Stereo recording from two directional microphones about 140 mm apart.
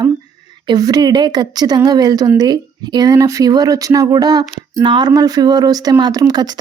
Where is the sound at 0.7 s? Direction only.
25° right (ahead or behind).